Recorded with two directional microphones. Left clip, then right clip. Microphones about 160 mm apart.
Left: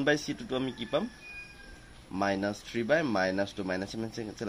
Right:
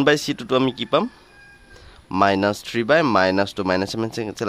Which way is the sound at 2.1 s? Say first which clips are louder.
Right 13 dB; 65° right (ahead or behind).